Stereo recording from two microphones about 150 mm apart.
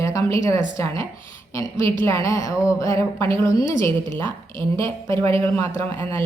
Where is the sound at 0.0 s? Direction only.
20° left (ahead or behind).